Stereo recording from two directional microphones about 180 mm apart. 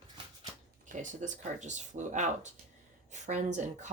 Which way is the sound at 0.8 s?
45° right (ahead or behind).